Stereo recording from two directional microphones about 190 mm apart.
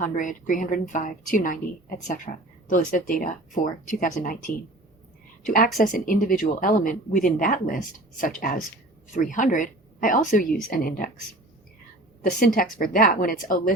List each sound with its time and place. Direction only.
0.0 s speech: 45° left (ahead or behind)
12.5 s speech: 50° left (ahead or behind)